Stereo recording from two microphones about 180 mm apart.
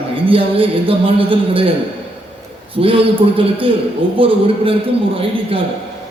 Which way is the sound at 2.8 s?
30° right (ahead or behind).